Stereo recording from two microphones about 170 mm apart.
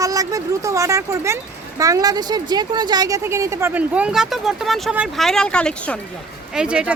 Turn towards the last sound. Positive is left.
turn(degrees=-5)  # may be behind; listen again after turning